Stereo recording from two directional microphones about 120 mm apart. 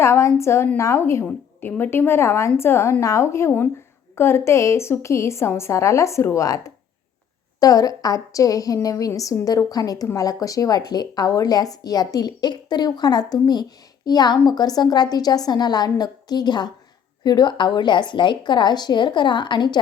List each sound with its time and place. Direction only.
0.0 s a woman's voice: 25° left (ahead or behind)
7.6 s a woman's voice: 30° left (ahead or behind)